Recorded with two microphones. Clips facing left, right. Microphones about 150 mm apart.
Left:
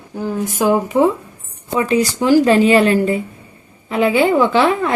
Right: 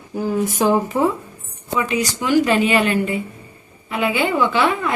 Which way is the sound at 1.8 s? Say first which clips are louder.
Left 7 dB; 35° left (ahead or behind).